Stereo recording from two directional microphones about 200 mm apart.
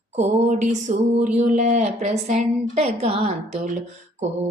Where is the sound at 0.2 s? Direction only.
35° right (ahead or behind).